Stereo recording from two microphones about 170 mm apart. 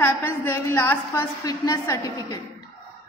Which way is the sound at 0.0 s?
15° left (ahead or behind).